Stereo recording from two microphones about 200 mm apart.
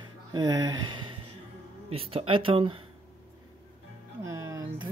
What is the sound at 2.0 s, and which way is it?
Speech, 30° right (ahead or behind).